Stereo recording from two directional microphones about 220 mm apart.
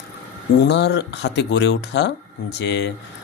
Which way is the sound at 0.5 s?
50° left (ahead or behind).